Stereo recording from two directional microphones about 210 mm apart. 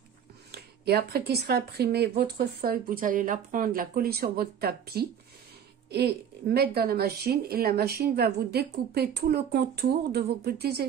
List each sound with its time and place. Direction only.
0.5 s speech: 50° right (ahead or behind)